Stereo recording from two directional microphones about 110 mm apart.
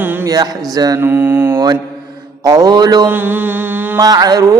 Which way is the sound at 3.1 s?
15° right (ahead or behind).